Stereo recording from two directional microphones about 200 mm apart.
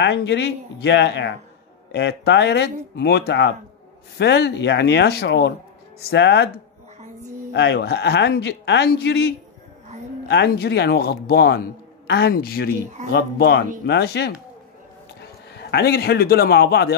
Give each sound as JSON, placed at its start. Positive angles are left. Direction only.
{"t": 0.0, "sound": "a man's voice", "side_deg": 60}
{"t": 7.5, "sound": "a man's voice", "side_deg": 60}
{"t": 15.5, "sound": "a man's voice", "side_deg": 55}